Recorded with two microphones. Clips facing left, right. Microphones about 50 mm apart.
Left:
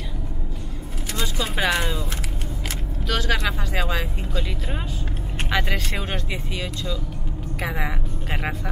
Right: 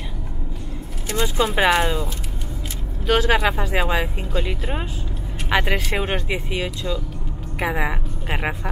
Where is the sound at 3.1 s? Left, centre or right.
Centre.